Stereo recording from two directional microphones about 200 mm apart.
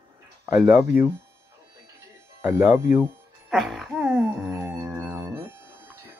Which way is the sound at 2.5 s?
15° right (ahead or behind).